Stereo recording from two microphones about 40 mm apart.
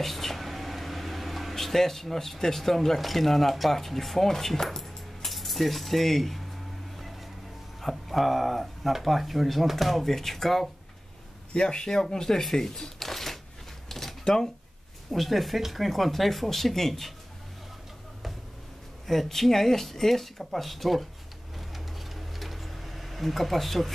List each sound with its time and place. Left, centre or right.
0.0 s speech: centre
7.8 s speech: centre
11.5 s speech: centre
13.8 s a sound: centre
14.2 s speech: centre
15.0 s speech: centre
19.0 s speech: centre
21.5 s a sound: centre